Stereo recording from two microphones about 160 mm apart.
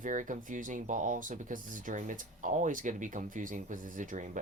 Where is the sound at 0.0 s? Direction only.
55° right (ahead or behind).